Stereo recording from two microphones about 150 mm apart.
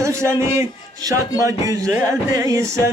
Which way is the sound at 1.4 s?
20° right (ahead or behind).